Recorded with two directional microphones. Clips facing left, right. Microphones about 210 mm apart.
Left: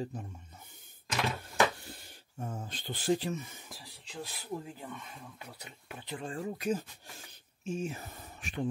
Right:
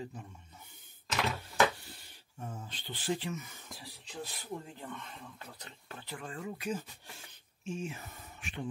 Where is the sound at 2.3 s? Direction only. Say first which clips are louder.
Left 4 dB; 45° left (ahead or behind).